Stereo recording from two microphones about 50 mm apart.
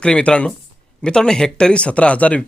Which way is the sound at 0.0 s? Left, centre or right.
Left.